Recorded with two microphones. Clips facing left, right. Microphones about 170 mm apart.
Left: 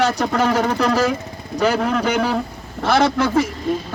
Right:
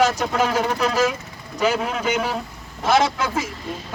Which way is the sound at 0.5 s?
50° left (ahead or behind).